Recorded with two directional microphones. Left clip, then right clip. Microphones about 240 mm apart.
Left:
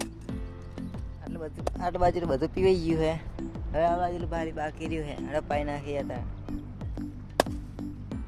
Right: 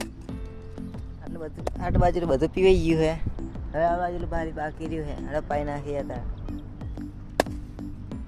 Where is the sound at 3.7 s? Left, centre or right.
Centre.